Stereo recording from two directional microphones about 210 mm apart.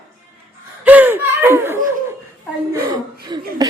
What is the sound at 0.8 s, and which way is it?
Laughter, 10° right (ahead or behind).